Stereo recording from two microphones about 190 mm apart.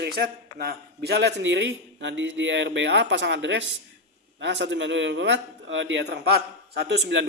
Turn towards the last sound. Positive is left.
turn(degrees=-65)  # may be behind; listen again after turning